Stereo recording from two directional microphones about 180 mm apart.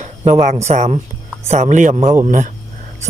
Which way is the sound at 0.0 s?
40° right (ahead or behind).